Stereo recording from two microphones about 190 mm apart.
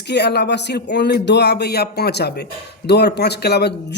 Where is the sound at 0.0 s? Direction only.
60° left (ahead or behind).